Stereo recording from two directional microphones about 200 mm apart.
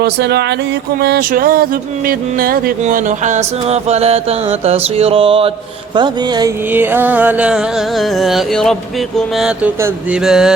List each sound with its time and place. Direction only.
0.0 s speech: 55° right (ahead or behind)
1.0 s a sound: 50° right (ahead or behind)
2.0 s music: 45° right (ahead or behind); by 10.5 s 5° right (ahead or behind)